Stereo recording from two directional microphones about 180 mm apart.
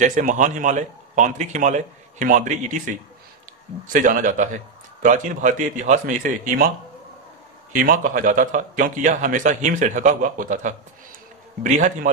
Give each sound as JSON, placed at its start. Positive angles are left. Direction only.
{"t": 0.0, "sound": "a man's voice", "side_deg": -45}
{"t": 3.8, "sound": "a man's voice", "side_deg": -45}
{"t": 7.7, "sound": "a man's voice", "side_deg": -50}